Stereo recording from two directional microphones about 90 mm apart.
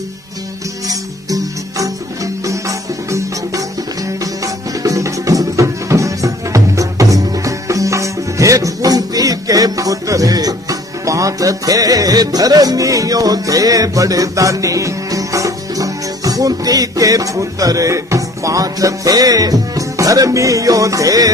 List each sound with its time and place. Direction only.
1.8 s music: 40° right (ahead or behind)